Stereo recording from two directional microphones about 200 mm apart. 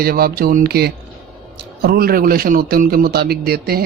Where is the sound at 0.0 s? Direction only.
50° right (ahead or behind).